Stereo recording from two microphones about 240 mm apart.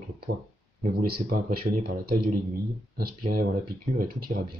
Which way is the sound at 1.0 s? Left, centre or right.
Right.